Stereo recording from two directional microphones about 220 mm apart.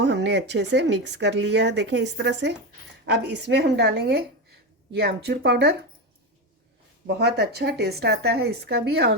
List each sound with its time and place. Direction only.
0.0 s speech: 50° right (ahead or behind)
7.1 s speech: 45° right (ahead or behind)